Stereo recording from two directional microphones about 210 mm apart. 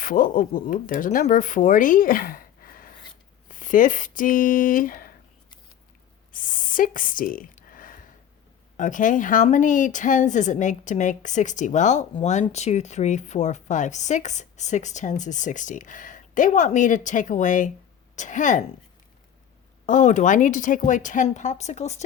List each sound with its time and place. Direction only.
0.0 s speech: 40° left (ahead or behind)
6.3 s speech: 40° left (ahead or behind)
19.8 s speech: 35° left (ahead or behind)